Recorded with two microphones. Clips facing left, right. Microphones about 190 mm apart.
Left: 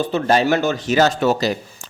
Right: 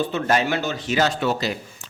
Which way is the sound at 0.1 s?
35° left (ahead or behind).